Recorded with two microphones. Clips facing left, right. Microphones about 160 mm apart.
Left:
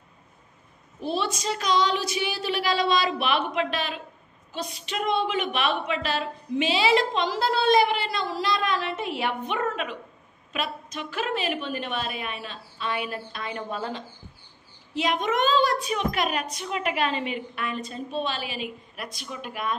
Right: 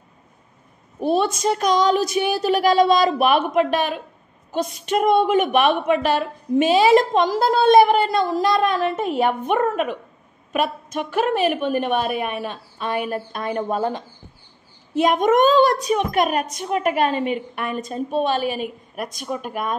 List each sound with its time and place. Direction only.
0.9 s a woman's voice: 50° right (ahead or behind)